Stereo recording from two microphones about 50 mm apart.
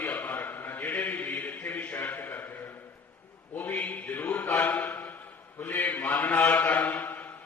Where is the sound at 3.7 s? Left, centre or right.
Left.